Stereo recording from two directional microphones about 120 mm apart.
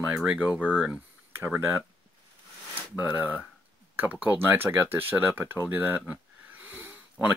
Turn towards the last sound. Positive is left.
turn(degrees=-15)  # may be behind; listen again after turning